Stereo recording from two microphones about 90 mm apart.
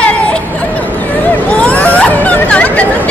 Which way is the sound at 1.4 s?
15° left (ahead or behind).